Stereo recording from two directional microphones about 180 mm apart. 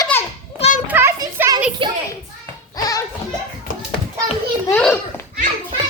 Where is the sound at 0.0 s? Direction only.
15° left (ahead or behind).